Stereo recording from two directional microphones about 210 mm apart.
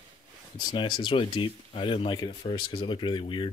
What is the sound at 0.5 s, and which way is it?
Speech, 20° left (ahead or behind).